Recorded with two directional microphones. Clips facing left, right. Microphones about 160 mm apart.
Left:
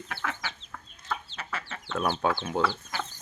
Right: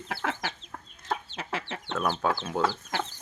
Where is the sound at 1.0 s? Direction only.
45° right (ahead or behind).